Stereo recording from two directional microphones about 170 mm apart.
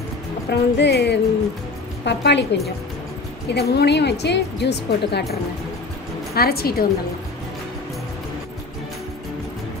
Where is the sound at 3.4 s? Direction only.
75° left (ahead or behind).